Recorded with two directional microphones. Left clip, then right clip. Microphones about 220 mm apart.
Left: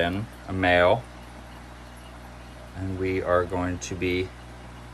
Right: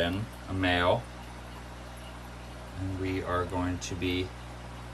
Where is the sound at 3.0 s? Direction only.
5° right (ahead or behind).